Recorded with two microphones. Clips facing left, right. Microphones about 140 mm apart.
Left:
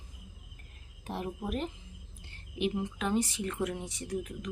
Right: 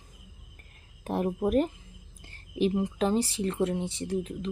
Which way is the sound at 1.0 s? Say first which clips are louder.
Right 9 dB; 50° right (ahead or behind).